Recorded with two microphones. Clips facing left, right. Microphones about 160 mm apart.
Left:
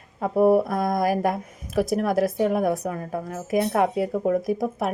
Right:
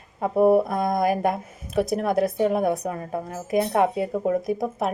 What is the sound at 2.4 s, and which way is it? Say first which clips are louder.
Speech: right 1 dB; 25° right (ahead or behind).